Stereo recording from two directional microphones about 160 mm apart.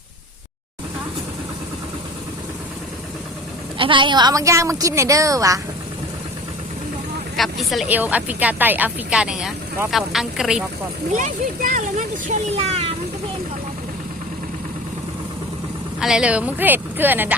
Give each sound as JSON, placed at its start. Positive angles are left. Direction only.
{"t": 3.8, "sound": "a woman's voice", "side_deg": -30}
{"t": 7.3, "sound": "speech", "side_deg": 0}
{"t": 7.9, "sound": "speech", "side_deg": -10}
{"t": 11.1, "sound": "speech", "side_deg": -50}
{"t": 16.0, "sound": "speech", "side_deg": -5}